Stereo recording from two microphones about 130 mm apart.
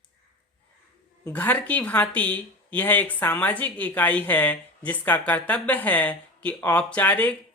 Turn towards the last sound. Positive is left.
turn(degrees=10)  # may be behind; listen again after turning